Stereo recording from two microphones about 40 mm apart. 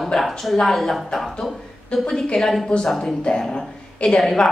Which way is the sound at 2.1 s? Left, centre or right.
Centre.